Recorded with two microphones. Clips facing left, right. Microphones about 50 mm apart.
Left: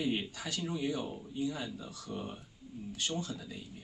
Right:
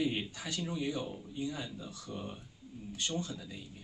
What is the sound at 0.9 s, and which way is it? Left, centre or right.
A man's voice, centre.